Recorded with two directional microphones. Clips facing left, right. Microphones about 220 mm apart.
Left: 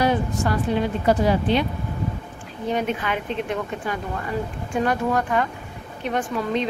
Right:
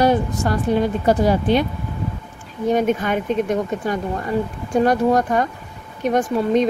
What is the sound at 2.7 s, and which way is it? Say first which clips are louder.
Speech: right 6 dB; 45° right (ahead or behind).